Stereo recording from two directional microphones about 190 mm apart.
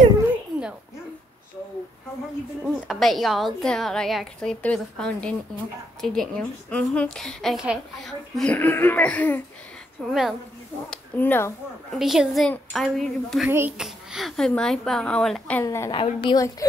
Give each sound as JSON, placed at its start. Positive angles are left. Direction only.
{"t": 2.6, "sound": "a woman's voice", "side_deg": 0}
{"t": 11.9, "sound": "a woman's voice", "side_deg": 0}
{"t": 13.5, "sound": "a woman's voice", "side_deg": -10}
{"t": 15.6, "sound": "speech", "side_deg": 15}
{"t": 16.0, "sound": "a woman's voice", "side_deg": 30}